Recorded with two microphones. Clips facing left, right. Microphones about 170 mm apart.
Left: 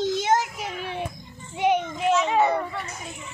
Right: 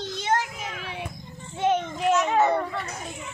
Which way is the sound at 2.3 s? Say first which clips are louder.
Even; 10° left (ahead or behind).